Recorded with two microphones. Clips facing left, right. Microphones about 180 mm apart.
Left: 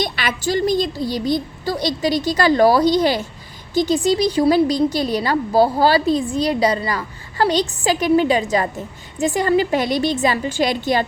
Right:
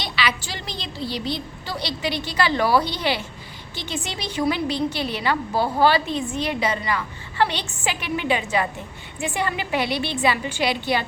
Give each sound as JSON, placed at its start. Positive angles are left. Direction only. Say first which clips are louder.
{"t": 0.0, "sound": "a woman's voice", "louder": "left 5 dB", "side_deg": 45}